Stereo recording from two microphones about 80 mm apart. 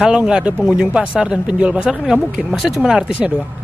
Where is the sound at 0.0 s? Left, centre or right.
Centre.